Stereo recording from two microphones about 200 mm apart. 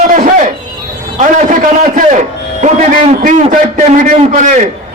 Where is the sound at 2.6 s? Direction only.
40° right (ahead or behind).